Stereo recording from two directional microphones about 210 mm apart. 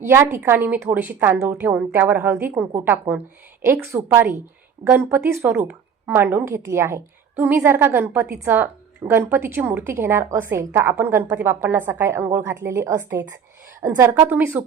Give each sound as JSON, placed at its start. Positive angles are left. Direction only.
{"t": 0.0, "sound": "a woman's voice", "side_deg": -10}